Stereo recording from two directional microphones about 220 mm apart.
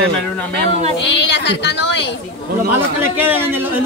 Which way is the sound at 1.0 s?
50° left (ahead or behind).